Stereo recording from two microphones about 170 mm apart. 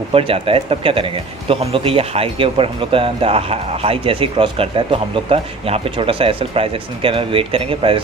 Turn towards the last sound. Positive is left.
turn(degrees=-35)  # may be behind; listen again after turning